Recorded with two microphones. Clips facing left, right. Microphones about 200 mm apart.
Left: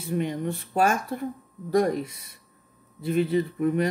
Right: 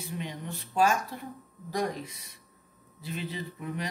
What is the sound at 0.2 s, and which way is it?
Speech, 55° left (ahead or behind).